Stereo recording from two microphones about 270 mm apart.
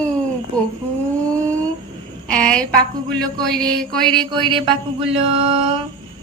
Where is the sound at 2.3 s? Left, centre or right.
Centre.